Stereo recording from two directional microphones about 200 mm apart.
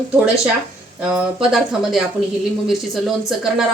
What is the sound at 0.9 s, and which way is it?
Speech, 5° right (ahead or behind).